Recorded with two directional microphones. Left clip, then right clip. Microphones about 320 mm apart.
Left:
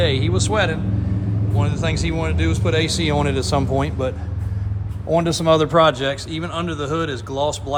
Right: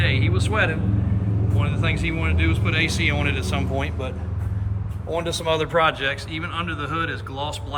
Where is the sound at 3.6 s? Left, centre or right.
Left.